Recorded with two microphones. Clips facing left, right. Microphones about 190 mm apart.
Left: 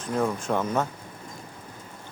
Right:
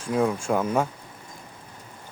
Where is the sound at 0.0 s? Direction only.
10° right (ahead or behind).